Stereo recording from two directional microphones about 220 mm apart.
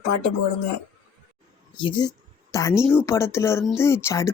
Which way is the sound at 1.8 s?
20° left (ahead or behind).